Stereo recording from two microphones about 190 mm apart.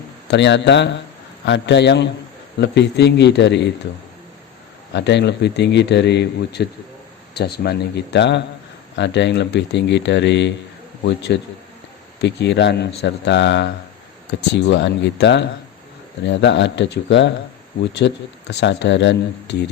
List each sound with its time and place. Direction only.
0.3 s a man's voice: 65° left (ahead or behind)
4.9 s a man's voice: 65° left (ahead or behind)